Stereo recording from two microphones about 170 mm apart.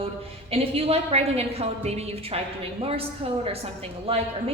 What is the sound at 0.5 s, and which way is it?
A woman's voice, 35° right (ahead or behind).